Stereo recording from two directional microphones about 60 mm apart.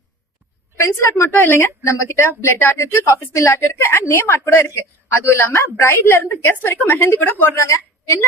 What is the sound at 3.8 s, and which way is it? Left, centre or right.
A woman's voice, left.